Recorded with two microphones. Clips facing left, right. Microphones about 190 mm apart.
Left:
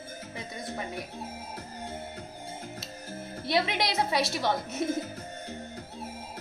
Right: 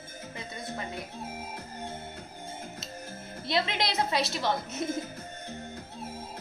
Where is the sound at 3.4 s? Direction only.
10° left (ahead or behind).